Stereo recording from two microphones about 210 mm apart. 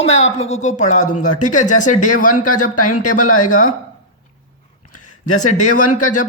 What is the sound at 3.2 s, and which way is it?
Speech, 90° left.